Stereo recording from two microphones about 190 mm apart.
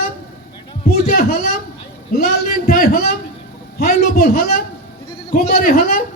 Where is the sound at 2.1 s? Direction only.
50° left (ahead or behind).